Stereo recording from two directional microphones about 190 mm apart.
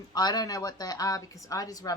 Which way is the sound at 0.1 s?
20° left (ahead or behind).